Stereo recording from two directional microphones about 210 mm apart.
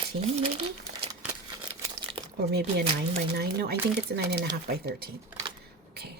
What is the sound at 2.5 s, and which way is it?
Speech, 50° right (ahead or behind).